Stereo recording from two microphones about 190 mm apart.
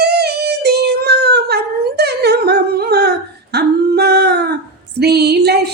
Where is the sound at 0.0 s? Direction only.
60° right (ahead or behind).